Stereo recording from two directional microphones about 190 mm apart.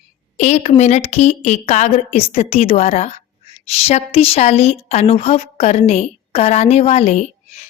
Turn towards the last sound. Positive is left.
turn(degrees=35)  # may be behind; listen again after turning